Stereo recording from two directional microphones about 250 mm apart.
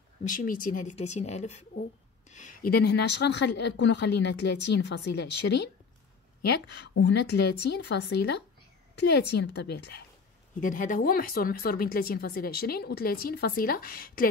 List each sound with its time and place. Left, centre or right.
0.2 s a woman's voice: left
10.6 s speech: left